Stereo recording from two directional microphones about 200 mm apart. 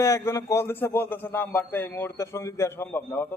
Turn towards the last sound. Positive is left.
turn(degrees=10)  # may be behind; listen again after turning